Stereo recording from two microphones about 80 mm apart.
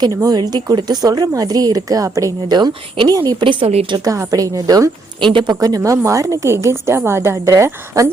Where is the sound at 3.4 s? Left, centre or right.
Right.